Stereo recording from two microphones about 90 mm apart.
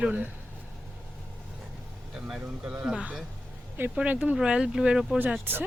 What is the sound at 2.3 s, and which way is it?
Speech, 10° right (ahead or behind).